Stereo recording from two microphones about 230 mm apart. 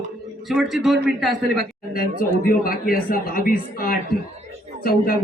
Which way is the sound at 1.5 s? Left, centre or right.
Left.